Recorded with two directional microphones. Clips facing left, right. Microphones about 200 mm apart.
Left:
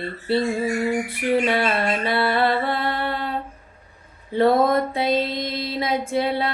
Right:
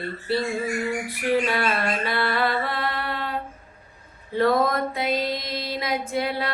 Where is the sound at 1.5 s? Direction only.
25° left (ahead or behind).